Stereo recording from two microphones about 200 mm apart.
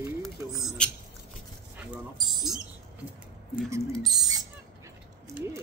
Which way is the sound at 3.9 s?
Centre (ahead or behind).